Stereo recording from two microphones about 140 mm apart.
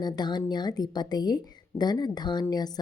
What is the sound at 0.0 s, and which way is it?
Speech, 30° left (ahead or behind).